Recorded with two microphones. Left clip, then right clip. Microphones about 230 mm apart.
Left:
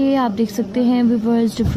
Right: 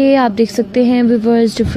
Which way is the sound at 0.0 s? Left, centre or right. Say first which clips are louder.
Right 7 dB; right.